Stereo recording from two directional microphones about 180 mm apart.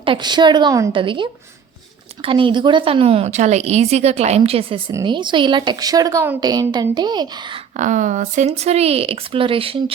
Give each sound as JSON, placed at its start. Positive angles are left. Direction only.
{"t": 0.0, "sound": "a woman's voice", "side_deg": -25}
{"t": 4.9, "sound": "a woman's voice", "side_deg": -20}
{"t": 7.8, "sound": "a woman's voice", "side_deg": -45}